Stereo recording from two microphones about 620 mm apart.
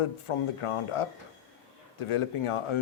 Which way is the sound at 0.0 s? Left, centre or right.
Left.